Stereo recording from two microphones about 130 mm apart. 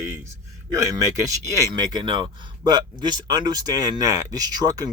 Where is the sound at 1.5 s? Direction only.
25° right (ahead or behind).